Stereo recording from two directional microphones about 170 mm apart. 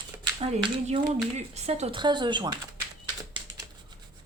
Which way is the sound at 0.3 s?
35° right (ahead or behind).